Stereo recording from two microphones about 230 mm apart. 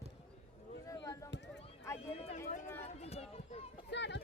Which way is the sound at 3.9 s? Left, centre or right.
Left.